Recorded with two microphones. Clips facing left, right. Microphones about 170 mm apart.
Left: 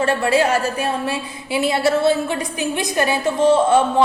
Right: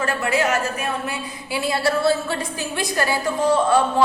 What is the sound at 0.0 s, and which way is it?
A woman's voice, 30° left (ahead or behind).